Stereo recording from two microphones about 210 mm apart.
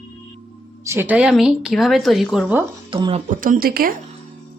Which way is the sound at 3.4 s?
45° right (ahead or behind).